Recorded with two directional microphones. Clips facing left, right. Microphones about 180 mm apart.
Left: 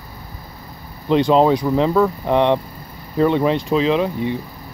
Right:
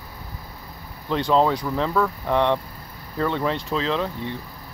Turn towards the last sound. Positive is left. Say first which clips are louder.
# left 7 dB
turn(degrees=15)  # may be behind; listen again after turning